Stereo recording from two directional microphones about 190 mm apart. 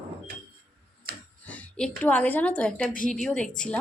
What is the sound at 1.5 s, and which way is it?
A woman's voice, 5° left (ahead or behind).